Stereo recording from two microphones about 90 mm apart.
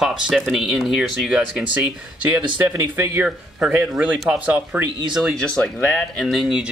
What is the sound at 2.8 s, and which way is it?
Speech, 30° right (ahead or behind).